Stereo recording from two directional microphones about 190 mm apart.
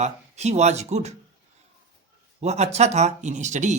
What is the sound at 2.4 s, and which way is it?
Speech, 35° right (ahead or behind).